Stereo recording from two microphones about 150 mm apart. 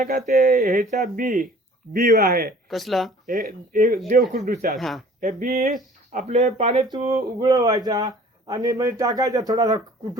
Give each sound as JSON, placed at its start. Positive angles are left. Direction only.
{"t": 0.0, "sound": "speech", "side_deg": -60}
{"t": 1.9, "sound": "speech", "side_deg": -75}
{"t": 2.6, "sound": "speech", "side_deg": 0}
{"t": 3.7, "sound": "speech", "side_deg": -60}
{"t": 4.7, "sound": "speech", "side_deg": 0}
{"t": 5.2, "sound": "speech", "side_deg": -50}
{"t": 6.9, "sound": "speech", "side_deg": -25}